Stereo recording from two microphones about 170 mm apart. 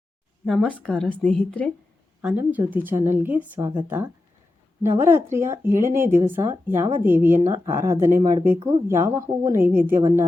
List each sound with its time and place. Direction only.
0.4 s a woman's voice: centre (ahead or behind)
2.2 s speech: 10° right (ahead or behind)